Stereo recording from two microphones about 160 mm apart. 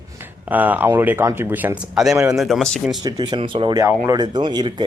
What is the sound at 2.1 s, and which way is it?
Speech, 20° right (ahead or behind).